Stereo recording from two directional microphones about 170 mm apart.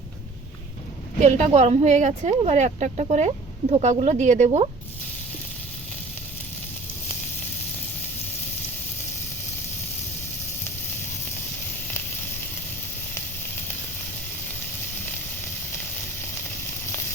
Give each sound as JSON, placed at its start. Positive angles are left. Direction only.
{"t": 1.2, "sound": "speech", "side_deg": -45}